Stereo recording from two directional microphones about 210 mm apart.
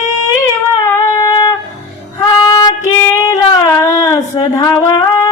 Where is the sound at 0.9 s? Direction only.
20° left (ahead or behind).